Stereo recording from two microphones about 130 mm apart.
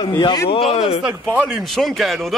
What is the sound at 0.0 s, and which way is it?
Speech, 35° left (ahead or behind).